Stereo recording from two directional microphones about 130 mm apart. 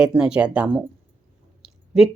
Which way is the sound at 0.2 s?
5° right (ahead or behind).